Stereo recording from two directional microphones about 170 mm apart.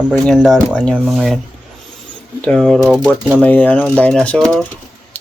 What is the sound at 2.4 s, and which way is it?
Speech, centre (ahead or behind).